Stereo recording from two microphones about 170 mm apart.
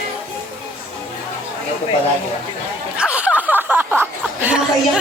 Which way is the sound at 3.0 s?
5° right (ahead or behind).